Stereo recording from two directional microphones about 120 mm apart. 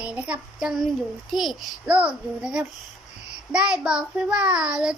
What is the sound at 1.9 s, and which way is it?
A child's voice, 10° right (ahead or behind).